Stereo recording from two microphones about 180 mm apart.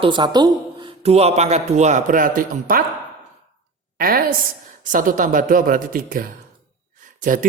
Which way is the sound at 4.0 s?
55° right (ahead or behind).